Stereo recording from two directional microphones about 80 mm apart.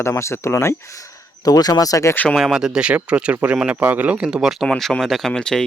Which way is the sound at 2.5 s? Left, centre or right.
Centre.